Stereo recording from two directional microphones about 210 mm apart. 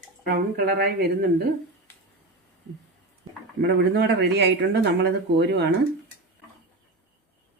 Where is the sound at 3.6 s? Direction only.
55° right (ahead or behind).